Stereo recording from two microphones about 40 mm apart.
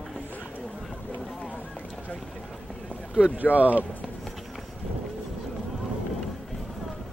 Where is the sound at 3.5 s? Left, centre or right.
Right.